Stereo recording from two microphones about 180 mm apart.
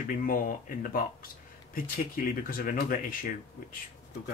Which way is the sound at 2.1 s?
50° left (ahead or behind).